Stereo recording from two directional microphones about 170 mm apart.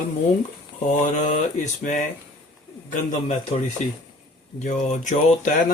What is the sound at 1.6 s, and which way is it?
Speech, 45° left (ahead or behind).